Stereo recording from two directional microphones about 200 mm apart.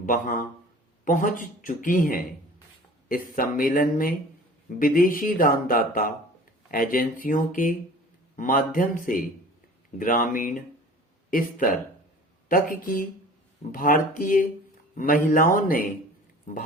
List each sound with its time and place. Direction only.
0.0 s a man's voice: 45° left (ahead or behind)
3.3 s speech: 45° left (ahead or behind)